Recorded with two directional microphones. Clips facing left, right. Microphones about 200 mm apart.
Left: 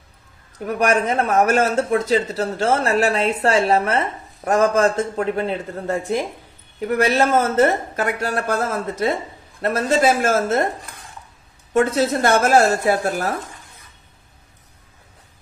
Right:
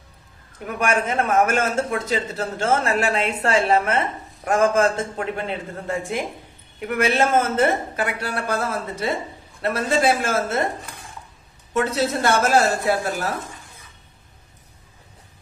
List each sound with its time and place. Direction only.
0.7 s a man's voice: 40° left (ahead or behind)
11.7 s speech: 50° left (ahead or behind)